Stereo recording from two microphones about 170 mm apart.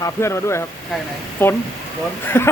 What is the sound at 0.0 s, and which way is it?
Speech, 15° left (ahead or behind).